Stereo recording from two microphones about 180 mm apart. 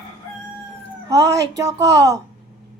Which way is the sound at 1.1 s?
20° right (ahead or behind).